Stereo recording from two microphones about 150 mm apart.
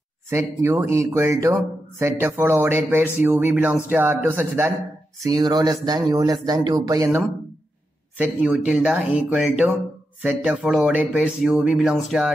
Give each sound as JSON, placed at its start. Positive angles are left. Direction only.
{"t": 0.3, "sound": "a man's voice", "side_deg": -15}
{"t": 8.2, "sound": "speech", "side_deg": -10}